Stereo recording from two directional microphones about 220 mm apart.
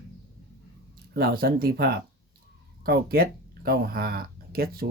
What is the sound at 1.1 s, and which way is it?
Speech, 45° right (ahead or behind).